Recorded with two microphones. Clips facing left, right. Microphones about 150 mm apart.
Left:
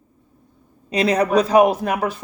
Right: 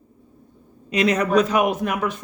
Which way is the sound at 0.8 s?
35° left (ahead or behind).